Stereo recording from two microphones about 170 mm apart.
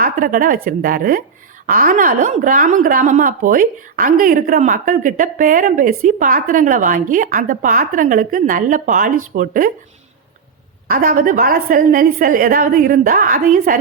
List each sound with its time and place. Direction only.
0.0 s a woman's voice: 55° right (ahead or behind)
10.8 s a woman's voice: 55° right (ahead or behind)